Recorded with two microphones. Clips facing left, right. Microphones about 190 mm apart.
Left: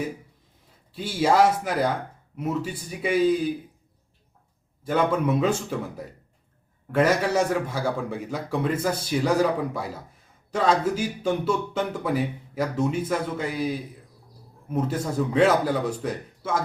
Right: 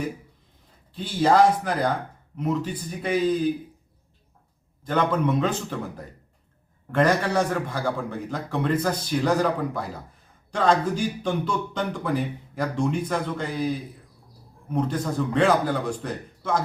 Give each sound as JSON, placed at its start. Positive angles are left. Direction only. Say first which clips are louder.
{"t": 0.9, "sound": "a man's voice", "louder": "right 1 dB", "side_deg": 5}
{"t": 4.8, "sound": "a man's voice", "louder": "even", "side_deg": 10}
{"t": 6.9, "sound": "a man's voice", "louder": "even", "side_deg": 10}